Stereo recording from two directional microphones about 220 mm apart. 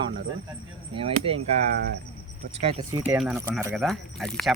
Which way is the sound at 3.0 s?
5° right (ahead or behind).